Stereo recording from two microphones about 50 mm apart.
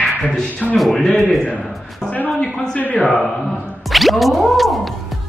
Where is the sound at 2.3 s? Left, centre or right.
Centre.